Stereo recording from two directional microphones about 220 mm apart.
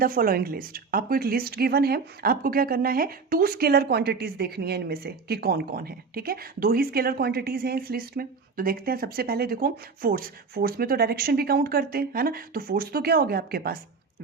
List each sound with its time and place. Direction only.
0.0 s speech: 40° right (ahead or behind)